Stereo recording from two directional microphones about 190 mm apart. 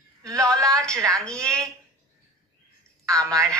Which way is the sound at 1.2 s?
5° left (ahead or behind).